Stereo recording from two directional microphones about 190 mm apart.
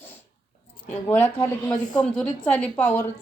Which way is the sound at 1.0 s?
10° left (ahead or behind).